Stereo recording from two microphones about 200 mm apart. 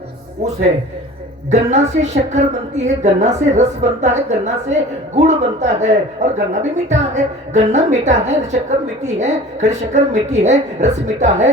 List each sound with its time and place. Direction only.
1.5 s a woman's voice: 35° right (ahead or behind)